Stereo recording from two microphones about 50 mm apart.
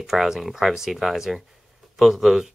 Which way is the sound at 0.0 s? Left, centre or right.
Centre.